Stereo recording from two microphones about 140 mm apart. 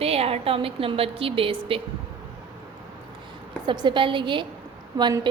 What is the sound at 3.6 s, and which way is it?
A woman's voice, 30° right (ahead or behind).